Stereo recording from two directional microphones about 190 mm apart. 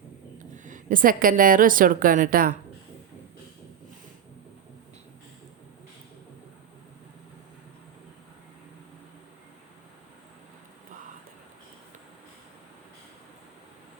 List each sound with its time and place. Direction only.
0.3 s a woman's voice: 40° right (ahead or behind)